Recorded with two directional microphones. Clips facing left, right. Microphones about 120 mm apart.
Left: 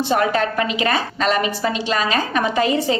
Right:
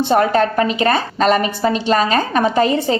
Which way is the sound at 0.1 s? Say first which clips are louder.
Right 5 dB; 40° right (ahead or behind).